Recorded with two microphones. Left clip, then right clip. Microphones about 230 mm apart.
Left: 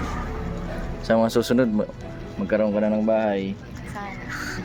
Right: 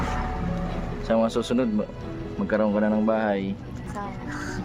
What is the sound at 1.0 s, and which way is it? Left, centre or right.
Speech, left.